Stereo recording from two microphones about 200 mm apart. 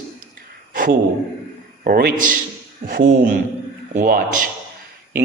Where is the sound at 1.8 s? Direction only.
45° right (ahead or behind).